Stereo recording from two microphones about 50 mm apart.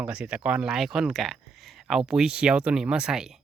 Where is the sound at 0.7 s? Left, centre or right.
Centre.